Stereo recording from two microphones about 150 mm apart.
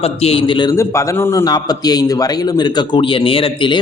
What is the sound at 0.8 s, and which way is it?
A man's voice, 20° left (ahead or behind).